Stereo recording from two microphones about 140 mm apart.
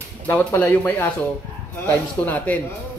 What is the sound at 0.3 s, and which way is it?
Speech, 15° left (ahead or behind).